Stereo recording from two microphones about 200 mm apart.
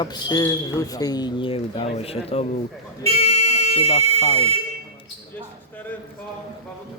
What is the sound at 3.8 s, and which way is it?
Speech, 30° left (ahead or behind).